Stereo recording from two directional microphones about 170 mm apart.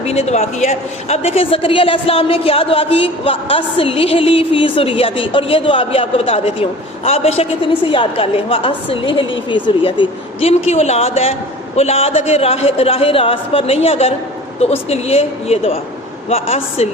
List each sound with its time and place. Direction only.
0.0 s a woman's voice: 40° left (ahead or behind)